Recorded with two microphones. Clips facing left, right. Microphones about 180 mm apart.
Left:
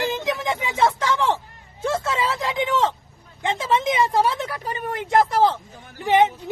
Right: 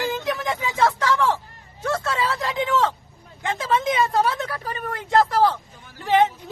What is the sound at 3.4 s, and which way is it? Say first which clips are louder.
Speech: left 1 dB; 20° left (ahead or behind).